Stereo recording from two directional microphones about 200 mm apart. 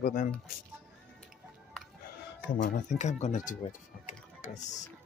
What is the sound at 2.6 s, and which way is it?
Speech, 40° left (ahead or behind).